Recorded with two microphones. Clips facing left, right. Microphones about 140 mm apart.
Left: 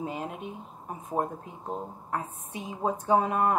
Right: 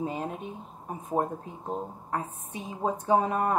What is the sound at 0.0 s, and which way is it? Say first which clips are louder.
Speech: right 2 dB; 35° right (ahead or behind).